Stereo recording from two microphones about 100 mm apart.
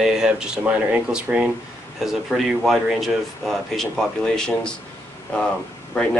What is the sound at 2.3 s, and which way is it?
Speech, centre (ahead or behind).